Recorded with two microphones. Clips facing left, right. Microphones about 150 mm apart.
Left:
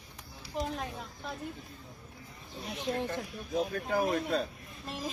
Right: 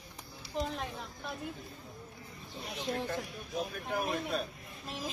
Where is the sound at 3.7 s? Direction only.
90° left.